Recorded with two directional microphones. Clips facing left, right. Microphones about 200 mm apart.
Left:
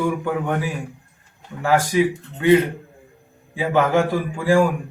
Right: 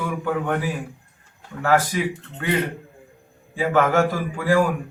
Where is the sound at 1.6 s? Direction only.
10° left (ahead or behind).